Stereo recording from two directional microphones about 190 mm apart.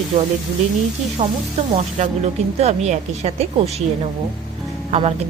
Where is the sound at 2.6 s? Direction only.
35° right (ahead or behind).